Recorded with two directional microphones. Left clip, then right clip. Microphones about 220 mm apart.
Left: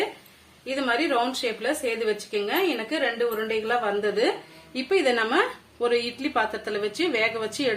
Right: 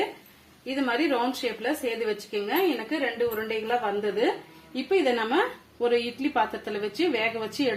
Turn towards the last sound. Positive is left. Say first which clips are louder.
# left 2 dB
turn(degrees=-20)  # may be behind; listen again after turning